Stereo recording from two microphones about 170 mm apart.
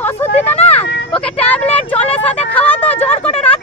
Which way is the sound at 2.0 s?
35° left (ahead or behind).